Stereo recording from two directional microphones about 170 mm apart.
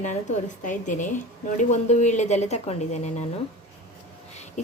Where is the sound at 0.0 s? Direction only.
45° left (ahead or behind).